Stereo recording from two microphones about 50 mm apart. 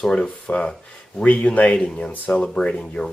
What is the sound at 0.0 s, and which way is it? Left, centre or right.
Speech, centre.